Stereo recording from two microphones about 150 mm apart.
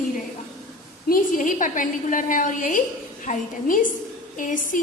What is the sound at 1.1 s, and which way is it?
A woman's voice, 65° left (ahead or behind).